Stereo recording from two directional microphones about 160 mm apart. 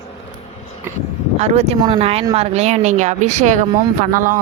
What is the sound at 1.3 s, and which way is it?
Speech, 40° right (ahead or behind).